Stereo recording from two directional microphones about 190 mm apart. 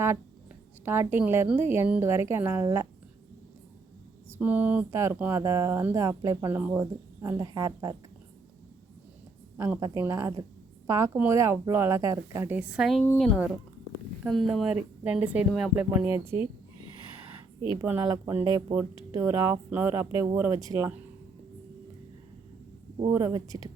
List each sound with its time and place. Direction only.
0.9 s speech: 10° right (ahead or behind)
4.3 s speech: 10° right (ahead or behind)
9.6 s speech: 15° right (ahead or behind)
17.8 s speech: 15° right (ahead or behind)
23.0 s speech: 15° right (ahead or behind)